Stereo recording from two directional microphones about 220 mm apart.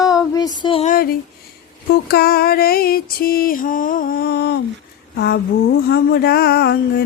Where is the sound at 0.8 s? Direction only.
40° left (ahead or behind).